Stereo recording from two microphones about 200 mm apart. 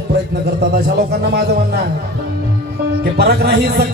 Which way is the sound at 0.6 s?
55° right (ahead or behind).